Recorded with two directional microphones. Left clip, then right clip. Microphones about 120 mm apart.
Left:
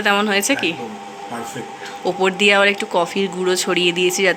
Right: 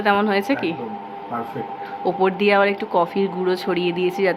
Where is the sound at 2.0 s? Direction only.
5° left (ahead or behind).